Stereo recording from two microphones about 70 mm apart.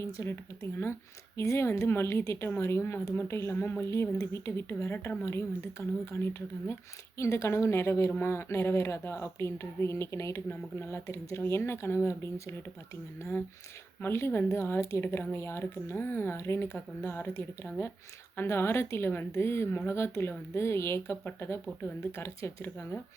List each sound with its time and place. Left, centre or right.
0.0 s speech: left
14.0 s a woman's voice: left